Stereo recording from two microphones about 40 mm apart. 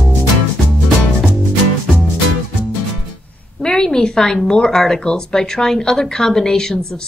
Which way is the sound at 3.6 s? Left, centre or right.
Centre.